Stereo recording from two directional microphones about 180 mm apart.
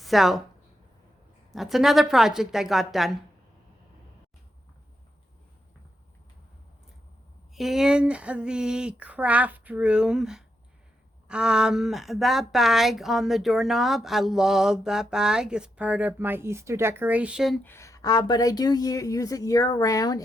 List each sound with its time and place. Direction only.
0.0 s speech: centre (ahead or behind)
1.5 s a woman's voice: centre (ahead or behind)
7.5 s a woman's voice: centre (ahead or behind)
17.6 s speech: 15° left (ahead or behind)